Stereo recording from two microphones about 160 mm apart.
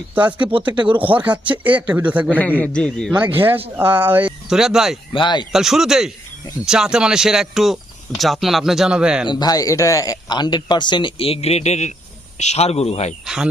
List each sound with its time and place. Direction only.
0.1 s speech: 10° right (ahead or behind)
0.7 s speech: 30° right (ahead or behind)
0.9 s speech: 10° right (ahead or behind)
2.4 s a man's voice: 10° left (ahead or behind)
3.3 s speech: 10° right (ahead or behind)
5.1 s a man's voice: 30° left (ahead or behind)
5.5 s speech: centre (ahead or behind)
9.3 s a man's voice: 25° left (ahead or behind); by 13.1 s 40° left (ahead or behind)
13.2 s speech: 5° right (ahead or behind)